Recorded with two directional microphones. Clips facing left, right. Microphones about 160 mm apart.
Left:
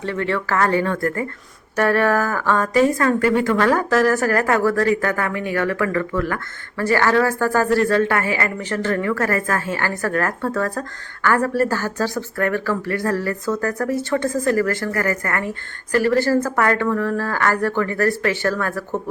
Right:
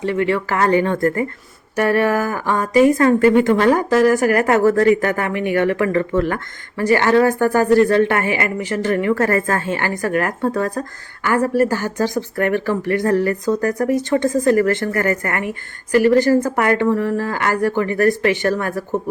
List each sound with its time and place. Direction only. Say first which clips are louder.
0.0 s a woman's voice: right 4 dB; 15° right (ahead or behind)